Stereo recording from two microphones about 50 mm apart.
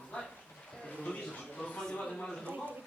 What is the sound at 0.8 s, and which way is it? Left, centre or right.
Speech, centre.